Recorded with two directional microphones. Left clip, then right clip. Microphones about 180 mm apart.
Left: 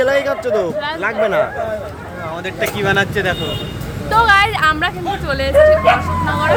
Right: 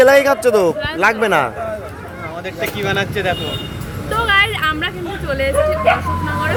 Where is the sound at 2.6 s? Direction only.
40° left (ahead or behind).